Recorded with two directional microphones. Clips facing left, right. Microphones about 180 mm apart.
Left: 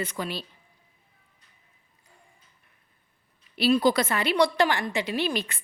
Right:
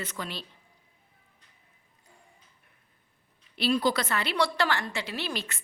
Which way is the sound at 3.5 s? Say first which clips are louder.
Left 5 dB; 10° left (ahead or behind).